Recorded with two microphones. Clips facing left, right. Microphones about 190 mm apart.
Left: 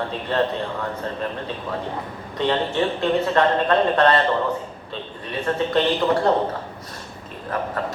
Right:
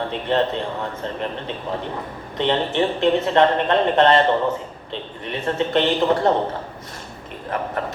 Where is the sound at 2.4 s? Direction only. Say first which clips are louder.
Right 1 dB; 20° right (ahead or behind).